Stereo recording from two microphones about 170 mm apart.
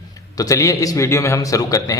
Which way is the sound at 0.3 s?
20° left (ahead or behind).